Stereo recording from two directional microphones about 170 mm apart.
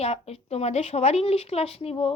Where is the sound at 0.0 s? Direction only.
35° left (ahead or behind).